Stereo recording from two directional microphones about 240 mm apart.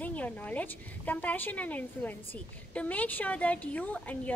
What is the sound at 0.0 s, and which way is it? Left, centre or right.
A woman's voice, centre.